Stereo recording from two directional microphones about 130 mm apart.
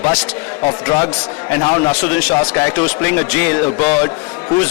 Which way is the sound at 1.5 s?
20° left (ahead or behind).